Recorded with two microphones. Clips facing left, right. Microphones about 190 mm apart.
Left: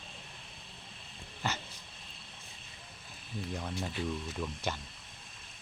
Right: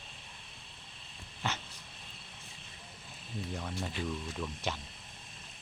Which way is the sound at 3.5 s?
Centre (ahead or behind).